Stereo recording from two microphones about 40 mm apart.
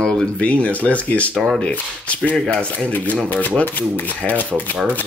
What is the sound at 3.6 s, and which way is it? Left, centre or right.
Speech, left.